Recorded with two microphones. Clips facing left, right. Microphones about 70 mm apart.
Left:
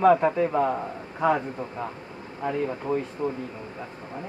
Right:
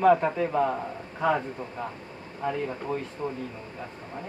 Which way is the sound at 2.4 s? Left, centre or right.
Centre.